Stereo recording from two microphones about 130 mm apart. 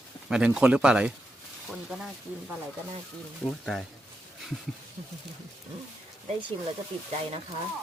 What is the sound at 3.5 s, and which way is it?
Speech, 5° left (ahead or behind).